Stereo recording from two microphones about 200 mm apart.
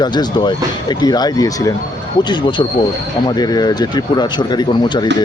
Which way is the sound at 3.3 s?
20° left (ahead or behind).